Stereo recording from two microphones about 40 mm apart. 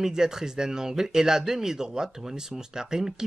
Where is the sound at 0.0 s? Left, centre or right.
Centre.